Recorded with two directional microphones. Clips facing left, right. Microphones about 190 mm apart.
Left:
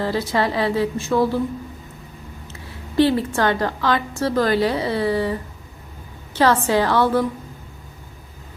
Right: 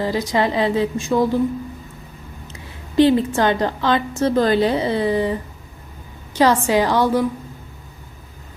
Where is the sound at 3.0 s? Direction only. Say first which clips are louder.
Right 3 dB; 20° right (ahead or behind).